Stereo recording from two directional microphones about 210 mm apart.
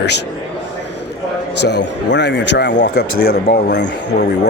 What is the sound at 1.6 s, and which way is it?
A man's voice, 55° left (ahead or behind).